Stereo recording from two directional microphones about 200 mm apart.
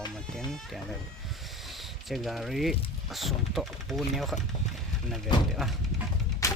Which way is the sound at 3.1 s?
Centre (ahead or behind).